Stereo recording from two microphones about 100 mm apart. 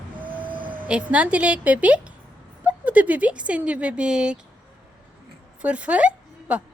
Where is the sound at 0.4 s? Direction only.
55° right (ahead or behind).